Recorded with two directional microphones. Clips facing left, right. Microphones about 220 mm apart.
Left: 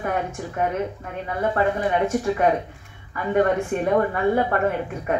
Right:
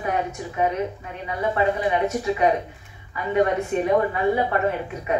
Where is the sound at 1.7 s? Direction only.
50° left (ahead or behind).